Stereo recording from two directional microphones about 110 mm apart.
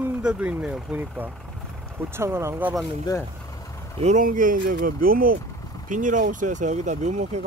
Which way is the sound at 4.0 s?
70° right (ahead or behind).